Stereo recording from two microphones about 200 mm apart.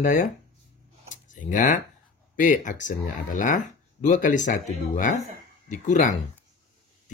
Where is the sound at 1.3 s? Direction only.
40° left (ahead or behind).